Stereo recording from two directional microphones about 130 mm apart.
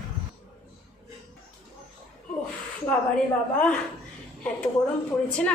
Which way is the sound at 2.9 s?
10° left (ahead or behind).